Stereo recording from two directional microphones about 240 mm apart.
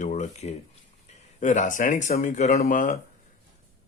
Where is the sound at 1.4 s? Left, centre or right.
Left.